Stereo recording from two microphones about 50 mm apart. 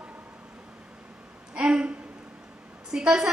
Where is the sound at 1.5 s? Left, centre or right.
Centre.